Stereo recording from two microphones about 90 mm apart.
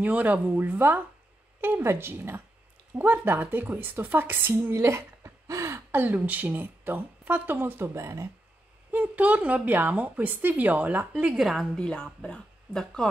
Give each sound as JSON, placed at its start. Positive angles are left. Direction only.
{"t": 0.0, "sound": "a woman's voice", "side_deg": -15}
{"t": 8.9, "sound": "a woman's voice", "side_deg": -20}
{"t": 11.2, "sound": "a woman's voice", "side_deg": -5}